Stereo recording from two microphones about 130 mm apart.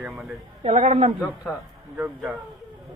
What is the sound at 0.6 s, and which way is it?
Speech, 55° right (ahead or behind).